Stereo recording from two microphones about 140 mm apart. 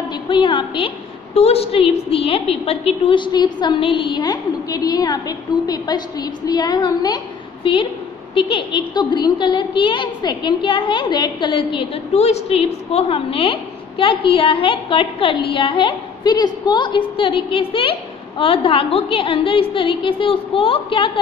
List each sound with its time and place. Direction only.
0.1 s a woman's voice: 35° left (ahead or behind)